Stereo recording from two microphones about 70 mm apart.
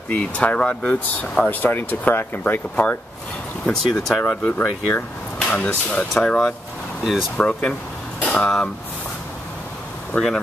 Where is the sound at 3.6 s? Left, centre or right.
Centre.